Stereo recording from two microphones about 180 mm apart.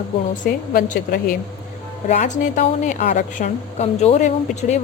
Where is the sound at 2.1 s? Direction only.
40° left (ahead or behind).